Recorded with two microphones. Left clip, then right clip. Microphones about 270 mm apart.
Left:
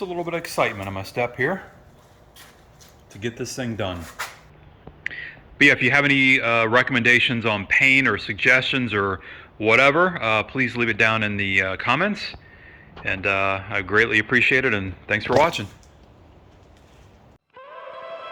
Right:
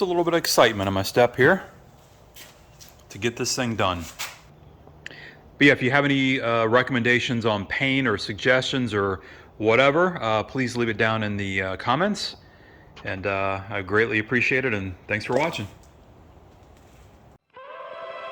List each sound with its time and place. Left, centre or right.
0.0 s speech: centre
3.2 s speech: centre
5.1 s speech: centre